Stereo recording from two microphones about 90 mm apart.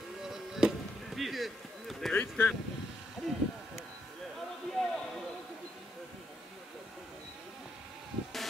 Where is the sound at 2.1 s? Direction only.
20° left (ahead or behind).